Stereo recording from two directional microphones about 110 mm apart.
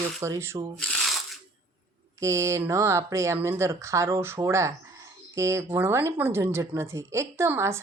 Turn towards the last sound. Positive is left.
turn(degrees=-25)  # may be behind; listen again after turning